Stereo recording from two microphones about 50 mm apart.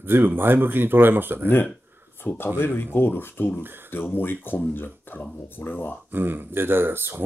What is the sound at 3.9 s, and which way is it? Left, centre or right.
Speech, left.